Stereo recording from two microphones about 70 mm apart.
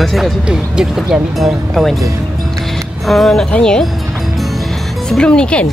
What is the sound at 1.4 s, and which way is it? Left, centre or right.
Speech, centre.